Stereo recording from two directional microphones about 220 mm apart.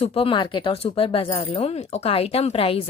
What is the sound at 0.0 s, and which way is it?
Speech, 25° left (ahead or behind).